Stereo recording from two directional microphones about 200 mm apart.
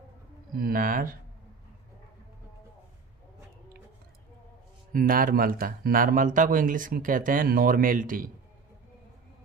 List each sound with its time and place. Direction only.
0.5 s speech: 45° right (ahead or behind)
4.9 s speech: 45° right (ahead or behind)